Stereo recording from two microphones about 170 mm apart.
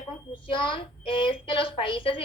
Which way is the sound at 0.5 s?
30° left (ahead or behind).